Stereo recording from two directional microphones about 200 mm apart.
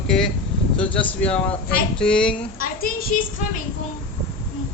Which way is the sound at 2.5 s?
45° left (ahead or behind).